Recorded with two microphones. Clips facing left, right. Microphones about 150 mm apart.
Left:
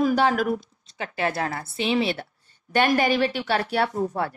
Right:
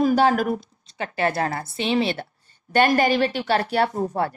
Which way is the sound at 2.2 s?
35° right (ahead or behind).